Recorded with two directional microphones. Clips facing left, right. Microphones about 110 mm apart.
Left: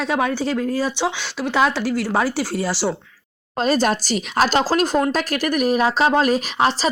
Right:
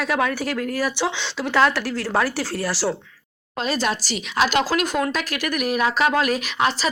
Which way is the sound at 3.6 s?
45° left (ahead or behind).